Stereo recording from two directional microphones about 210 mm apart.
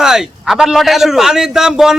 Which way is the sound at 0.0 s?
Centre (ahead or behind).